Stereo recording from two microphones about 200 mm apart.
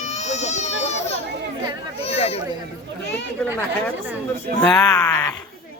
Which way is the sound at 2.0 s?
30° left (ahead or behind).